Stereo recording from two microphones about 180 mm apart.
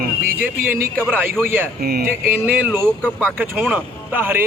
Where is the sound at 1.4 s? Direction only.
10° right (ahead or behind).